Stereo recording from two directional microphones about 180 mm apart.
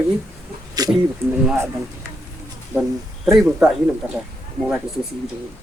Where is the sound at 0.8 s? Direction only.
20° right (ahead or behind).